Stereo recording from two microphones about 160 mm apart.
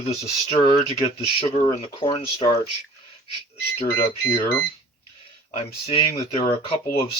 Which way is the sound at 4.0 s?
15° left (ahead or behind).